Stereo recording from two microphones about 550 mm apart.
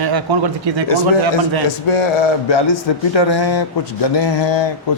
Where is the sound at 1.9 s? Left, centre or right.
Left.